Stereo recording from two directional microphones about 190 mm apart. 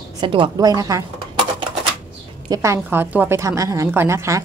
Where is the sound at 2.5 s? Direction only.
15° right (ahead or behind).